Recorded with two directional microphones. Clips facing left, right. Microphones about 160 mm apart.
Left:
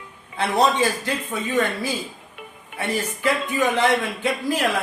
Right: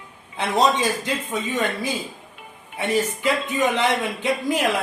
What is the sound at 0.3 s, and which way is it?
A man's voice, 20° right (ahead or behind).